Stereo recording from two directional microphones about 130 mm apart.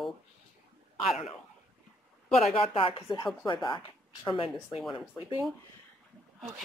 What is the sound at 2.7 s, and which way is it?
Speech, 45° left (ahead or behind).